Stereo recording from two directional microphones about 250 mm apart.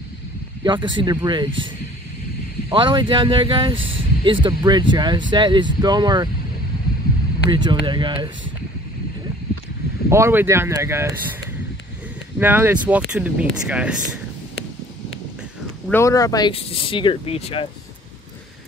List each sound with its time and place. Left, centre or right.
0.7 s speech: centre
2.7 s speech: centre
3.7 s speech: right
4.2 s speech: centre
7.5 s speech: centre
10.0 s speech: centre
12.4 s speech: centre
15.9 s speech: centre